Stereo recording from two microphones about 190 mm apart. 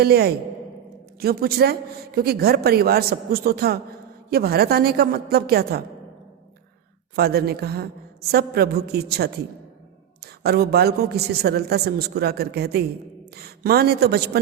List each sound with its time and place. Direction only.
0.0 s a man's voice: 55° right (ahead or behind)
7.2 s a man's voice: 55° right (ahead or behind)